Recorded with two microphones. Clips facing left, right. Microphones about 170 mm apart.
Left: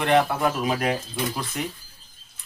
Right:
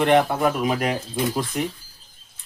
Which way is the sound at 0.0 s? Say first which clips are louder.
Right 3 dB; 20° right (ahead or behind).